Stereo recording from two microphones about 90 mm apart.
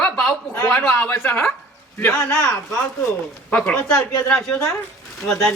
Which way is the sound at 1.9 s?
25° left (ahead or behind).